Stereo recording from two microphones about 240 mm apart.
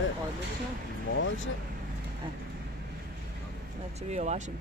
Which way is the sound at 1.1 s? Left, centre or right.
Left.